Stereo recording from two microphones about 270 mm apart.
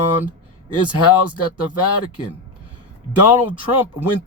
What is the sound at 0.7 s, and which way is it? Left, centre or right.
Speech, left.